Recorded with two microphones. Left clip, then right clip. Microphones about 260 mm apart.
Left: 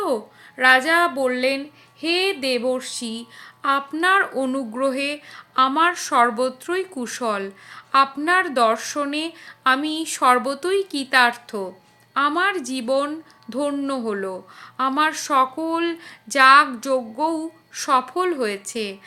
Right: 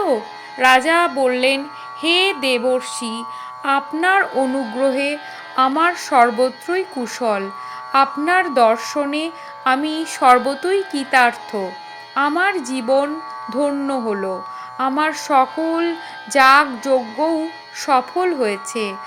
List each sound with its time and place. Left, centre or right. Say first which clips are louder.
0.6 s speech: right 2 dB; centre